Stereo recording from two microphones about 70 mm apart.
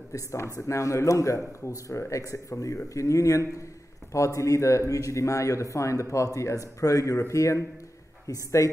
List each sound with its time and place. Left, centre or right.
0.1 s speech: left